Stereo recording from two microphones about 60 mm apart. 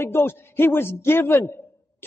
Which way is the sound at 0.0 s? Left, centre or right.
Left.